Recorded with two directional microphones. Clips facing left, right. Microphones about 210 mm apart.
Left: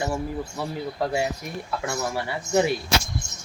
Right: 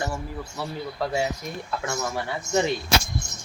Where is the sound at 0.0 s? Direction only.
15° left (ahead or behind).